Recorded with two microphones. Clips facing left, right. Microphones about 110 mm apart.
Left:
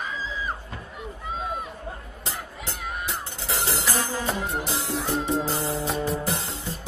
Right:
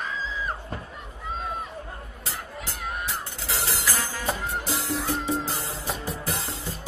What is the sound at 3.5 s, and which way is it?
Music, 25° left (ahead or behind).